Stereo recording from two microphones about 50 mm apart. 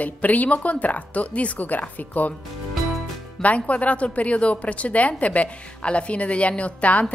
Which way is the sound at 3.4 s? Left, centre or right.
Left.